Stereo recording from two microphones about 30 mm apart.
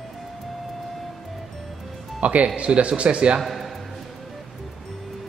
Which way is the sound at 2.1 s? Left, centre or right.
Right.